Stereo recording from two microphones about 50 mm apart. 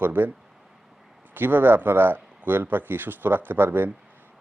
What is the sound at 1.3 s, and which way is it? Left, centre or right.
A man's voice, right.